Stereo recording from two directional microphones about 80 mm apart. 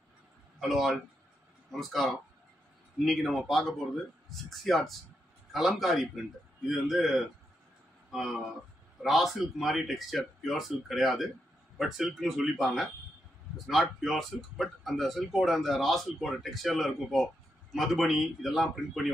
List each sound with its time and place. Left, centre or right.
0.6 s speech: centre